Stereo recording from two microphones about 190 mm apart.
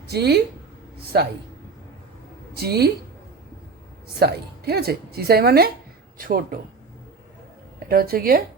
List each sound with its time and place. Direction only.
0.1 s a woman's voice: 60° right (ahead or behind)
2.6 s a woman's voice: 55° right (ahead or behind)
4.2 s a woman's voice: 55° right (ahead or behind)
7.9 s speech: 50° right (ahead or behind)